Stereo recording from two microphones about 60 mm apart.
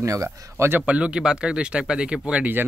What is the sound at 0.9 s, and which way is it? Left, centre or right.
Speech, centre.